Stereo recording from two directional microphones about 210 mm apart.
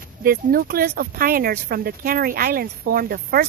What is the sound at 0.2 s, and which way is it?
Speech, 45° right (ahead or behind).